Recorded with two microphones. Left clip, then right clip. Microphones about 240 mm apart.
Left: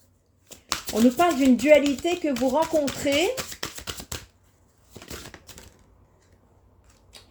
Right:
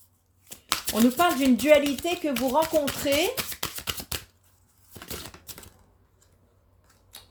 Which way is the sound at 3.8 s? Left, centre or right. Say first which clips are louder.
Right 3 dB; centre.